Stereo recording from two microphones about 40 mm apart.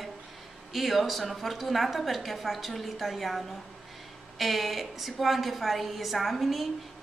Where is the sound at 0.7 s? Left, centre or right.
Centre.